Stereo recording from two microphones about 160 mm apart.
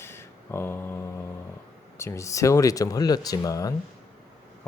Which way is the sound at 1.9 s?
15° left (ahead or behind).